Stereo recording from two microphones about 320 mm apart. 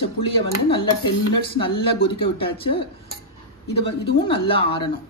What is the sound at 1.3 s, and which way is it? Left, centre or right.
Speech, centre.